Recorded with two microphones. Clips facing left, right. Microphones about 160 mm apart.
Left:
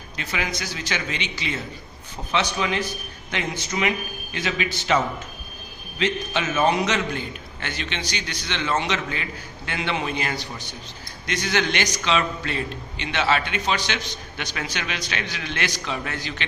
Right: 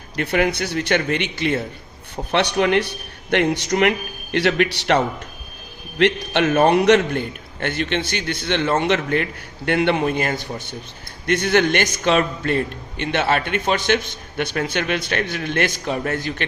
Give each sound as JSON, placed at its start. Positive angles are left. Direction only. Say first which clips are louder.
{"t": 0.2, "sound": "a man's voice", "louder": "right 10 dB", "side_deg": -60}
{"t": 2.3, "sound": "a man's voice", "louder": "right 7 dB", "side_deg": -65}